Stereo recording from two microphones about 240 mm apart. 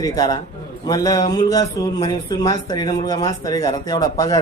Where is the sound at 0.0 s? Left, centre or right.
Centre.